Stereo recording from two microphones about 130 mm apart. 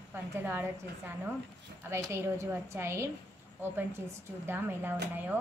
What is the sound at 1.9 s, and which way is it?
A woman's voice, 20° right (ahead or behind).